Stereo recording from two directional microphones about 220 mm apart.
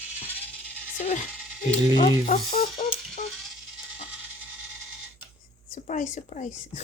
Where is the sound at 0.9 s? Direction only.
35° left (ahead or behind).